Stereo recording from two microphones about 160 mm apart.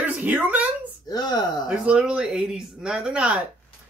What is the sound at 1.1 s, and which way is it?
Speech, 25° left (ahead or behind).